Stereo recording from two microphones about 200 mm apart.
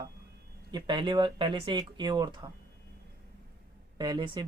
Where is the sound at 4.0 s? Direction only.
20° right (ahead or behind).